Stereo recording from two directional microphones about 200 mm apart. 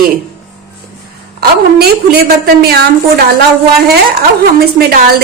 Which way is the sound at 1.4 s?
50° right (ahead or behind).